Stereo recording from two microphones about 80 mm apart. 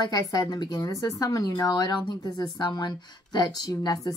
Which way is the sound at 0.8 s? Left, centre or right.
Left.